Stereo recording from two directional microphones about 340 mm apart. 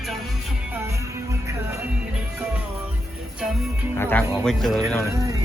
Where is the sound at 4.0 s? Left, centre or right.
Centre.